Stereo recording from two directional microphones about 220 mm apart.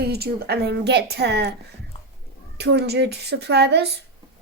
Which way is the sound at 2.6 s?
50° right (ahead or behind).